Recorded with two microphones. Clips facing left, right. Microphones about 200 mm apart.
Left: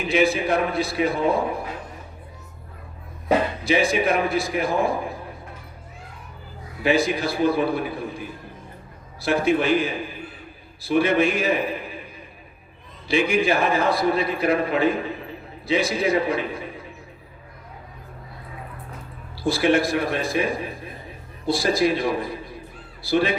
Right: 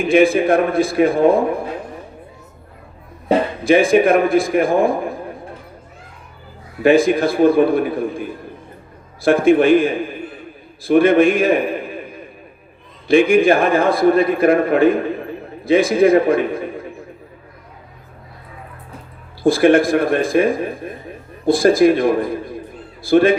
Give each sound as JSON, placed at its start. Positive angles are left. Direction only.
{"t": 0.0, "sound": "a man's voice", "side_deg": -50}
{"t": 3.6, "sound": "a man's voice", "side_deg": -50}
{"t": 6.8, "sound": "a man's voice", "side_deg": -50}
{"t": 13.1, "sound": "a man's voice", "side_deg": -50}
{"t": 19.4, "sound": "a man's voice", "side_deg": -50}